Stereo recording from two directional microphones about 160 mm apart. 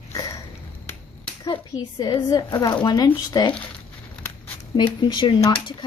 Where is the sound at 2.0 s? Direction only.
25° left (ahead or behind).